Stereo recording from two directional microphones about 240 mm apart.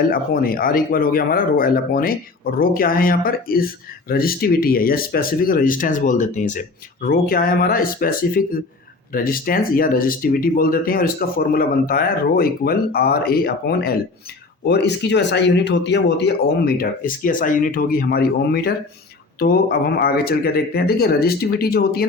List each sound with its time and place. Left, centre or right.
0.1 s speech: left